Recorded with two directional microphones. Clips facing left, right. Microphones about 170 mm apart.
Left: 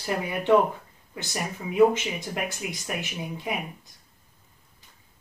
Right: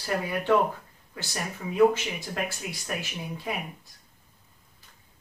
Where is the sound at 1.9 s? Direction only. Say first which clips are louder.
Left 2 dB; 20° left (ahead or behind).